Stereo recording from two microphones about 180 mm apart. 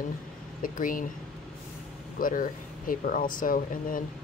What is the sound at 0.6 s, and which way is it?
Speech, 50° left (ahead or behind).